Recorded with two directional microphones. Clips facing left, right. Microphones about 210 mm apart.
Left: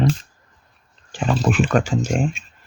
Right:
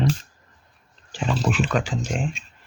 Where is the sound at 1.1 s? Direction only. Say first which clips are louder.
Left 4 dB; 50° left (ahead or behind).